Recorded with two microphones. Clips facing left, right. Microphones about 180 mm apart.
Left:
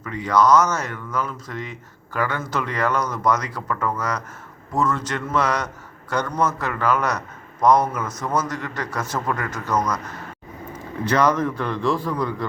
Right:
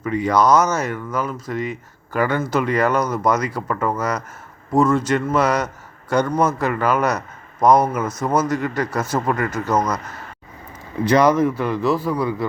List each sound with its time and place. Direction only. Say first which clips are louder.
0.0 s a man's voice: right 2 dB; 10° right (ahead or behind)
9.6 s speech: right 2 dB; 25° right (ahead or behind)
11.0 s a man's voice: right 5 dB; 10° right (ahead or behind)